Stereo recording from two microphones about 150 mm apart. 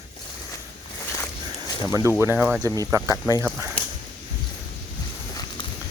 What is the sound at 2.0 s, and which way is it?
Speech, 15° right (ahead or behind).